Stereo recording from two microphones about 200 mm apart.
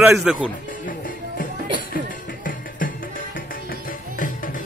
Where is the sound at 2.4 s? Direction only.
40° left (ahead or behind).